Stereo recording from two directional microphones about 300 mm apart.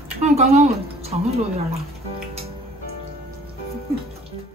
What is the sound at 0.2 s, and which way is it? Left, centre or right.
Speech, right.